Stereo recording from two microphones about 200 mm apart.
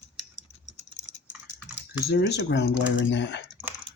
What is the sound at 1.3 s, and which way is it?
Typing, 5° right (ahead or behind).